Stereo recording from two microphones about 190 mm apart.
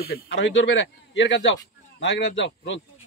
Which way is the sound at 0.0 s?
60° left (ahead or behind).